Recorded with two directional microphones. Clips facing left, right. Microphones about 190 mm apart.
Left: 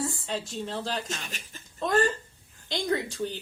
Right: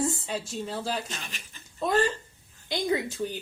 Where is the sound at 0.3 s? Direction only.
10° right (ahead or behind).